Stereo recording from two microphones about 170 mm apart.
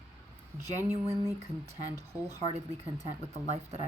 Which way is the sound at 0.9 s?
15° right (ahead or behind).